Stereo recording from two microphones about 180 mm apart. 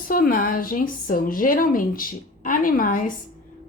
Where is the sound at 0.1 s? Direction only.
50° left (ahead or behind).